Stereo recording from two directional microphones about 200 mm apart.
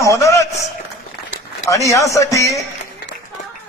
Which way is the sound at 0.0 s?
15° left (ahead or behind).